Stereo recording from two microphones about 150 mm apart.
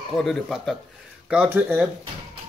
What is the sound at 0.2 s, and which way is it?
Speech, centre (ahead or behind).